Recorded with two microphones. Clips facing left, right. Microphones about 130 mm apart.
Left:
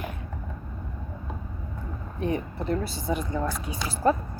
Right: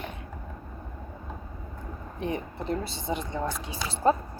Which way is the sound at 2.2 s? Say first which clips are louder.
Left 3 dB; 25° right (ahead or behind).